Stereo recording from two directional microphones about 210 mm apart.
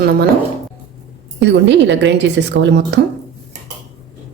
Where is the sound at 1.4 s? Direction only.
60° right (ahead or behind).